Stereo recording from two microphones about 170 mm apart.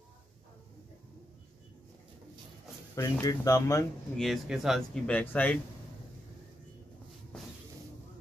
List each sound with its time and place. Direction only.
3.0 s speech: 20° left (ahead or behind)
4.2 s speech: centre (ahead or behind)